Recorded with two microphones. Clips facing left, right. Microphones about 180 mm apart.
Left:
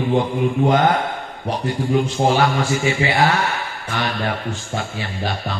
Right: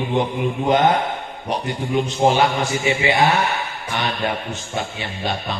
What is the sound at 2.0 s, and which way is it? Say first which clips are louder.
Music: right 1 dB; 20° right (ahead or behind).